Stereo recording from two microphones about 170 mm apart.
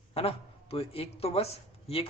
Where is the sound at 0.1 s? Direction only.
35° left (ahead or behind).